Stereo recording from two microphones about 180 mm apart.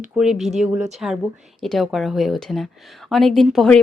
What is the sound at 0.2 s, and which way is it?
Speech, centre (ahead or behind).